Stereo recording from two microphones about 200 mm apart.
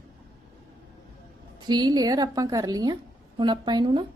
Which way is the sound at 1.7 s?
20° right (ahead or behind).